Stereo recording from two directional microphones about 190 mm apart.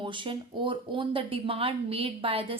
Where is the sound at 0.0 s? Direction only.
25° right (ahead or behind).